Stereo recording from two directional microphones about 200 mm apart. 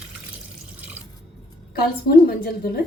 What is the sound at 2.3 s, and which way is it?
Speech, 50° left (ahead or behind).